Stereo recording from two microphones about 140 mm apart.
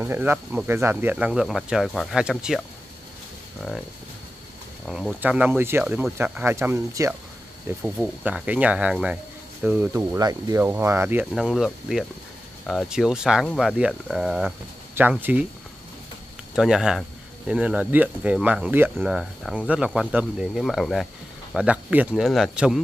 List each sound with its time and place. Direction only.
0.0 s speech: 15° right (ahead or behind)
1.1 s speech: 5° right (ahead or behind)
4.8 s speech: centre (ahead or behind)
5.2 s speech: 10° right (ahead or behind)
7.8 s speech: 5° right (ahead or behind)
11.3 s speech: 5° right (ahead or behind)
15.0 s speech: 15° right (ahead or behind)
16.5 s speech: 5° right (ahead or behind)
18.9 s speech: centre (ahead or behind)